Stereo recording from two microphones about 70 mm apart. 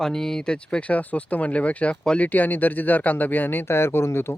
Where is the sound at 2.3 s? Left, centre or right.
Left.